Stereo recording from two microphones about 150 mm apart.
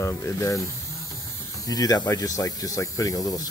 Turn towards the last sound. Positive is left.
turn(degrees=25)  # may be behind; listen again after turning